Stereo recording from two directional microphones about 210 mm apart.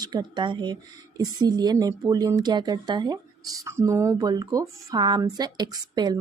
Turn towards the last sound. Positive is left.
turn(degrees=-20)  # may be behind; listen again after turning